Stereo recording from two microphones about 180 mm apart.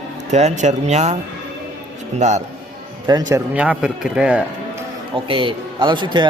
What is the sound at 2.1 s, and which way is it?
Speech, 40° right (ahead or behind).